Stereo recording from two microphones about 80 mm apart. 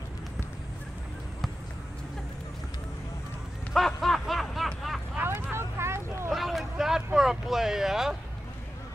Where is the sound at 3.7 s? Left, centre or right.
Centre.